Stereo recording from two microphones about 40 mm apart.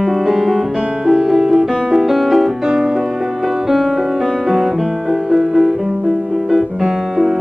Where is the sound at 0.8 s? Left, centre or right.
Right.